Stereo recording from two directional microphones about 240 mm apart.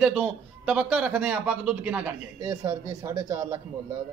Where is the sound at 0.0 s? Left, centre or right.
Centre.